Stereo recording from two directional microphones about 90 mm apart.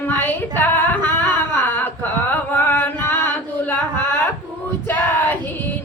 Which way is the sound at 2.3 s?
20° left (ahead or behind).